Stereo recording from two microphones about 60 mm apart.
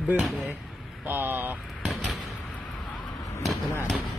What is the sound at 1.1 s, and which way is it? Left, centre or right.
Speech, right.